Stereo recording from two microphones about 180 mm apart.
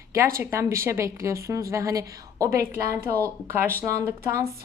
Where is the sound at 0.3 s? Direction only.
15° right (ahead or behind).